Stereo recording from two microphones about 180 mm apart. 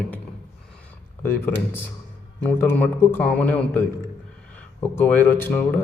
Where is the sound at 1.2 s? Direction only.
10° left (ahead or behind).